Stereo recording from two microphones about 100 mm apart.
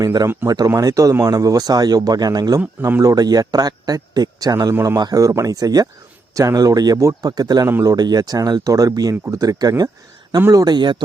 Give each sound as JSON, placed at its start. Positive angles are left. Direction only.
{"t": 0.0, "sound": "speech", "side_deg": -40}
{"t": 4.7, "sound": "speech", "side_deg": -25}
{"t": 4.9, "sound": "speech", "side_deg": -40}
{"t": 7.7, "sound": "speech", "side_deg": -30}
{"t": 7.9, "sound": "speech", "side_deg": -40}